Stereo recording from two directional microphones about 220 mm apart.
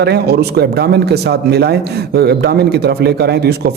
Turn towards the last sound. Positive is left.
turn(degrees=-45)  # may be behind; listen again after turning